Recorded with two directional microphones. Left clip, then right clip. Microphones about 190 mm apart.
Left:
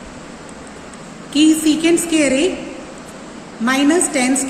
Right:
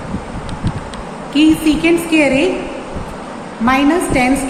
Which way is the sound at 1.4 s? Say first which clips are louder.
Right 1 dB; 25° left (ahead or behind).